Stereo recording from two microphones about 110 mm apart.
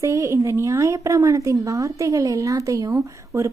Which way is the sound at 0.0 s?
30° right (ahead or behind).